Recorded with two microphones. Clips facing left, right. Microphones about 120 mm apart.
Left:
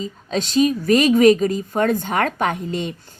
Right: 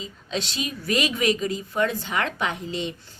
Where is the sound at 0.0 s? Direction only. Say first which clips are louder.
Left 6 dB; 40° left (ahead or behind).